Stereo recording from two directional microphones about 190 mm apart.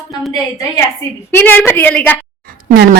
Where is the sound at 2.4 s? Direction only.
45° right (ahead or behind).